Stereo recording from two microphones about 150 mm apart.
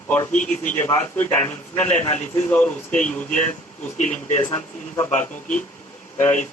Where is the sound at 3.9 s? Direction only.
50° left (ahead or behind).